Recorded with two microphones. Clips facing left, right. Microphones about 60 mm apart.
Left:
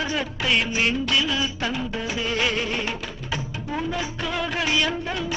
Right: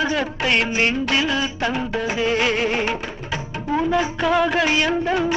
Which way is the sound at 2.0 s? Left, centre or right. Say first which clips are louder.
Right 5 dB; right.